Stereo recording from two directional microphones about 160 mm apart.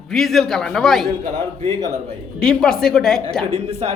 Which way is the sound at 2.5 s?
5° left (ahead or behind).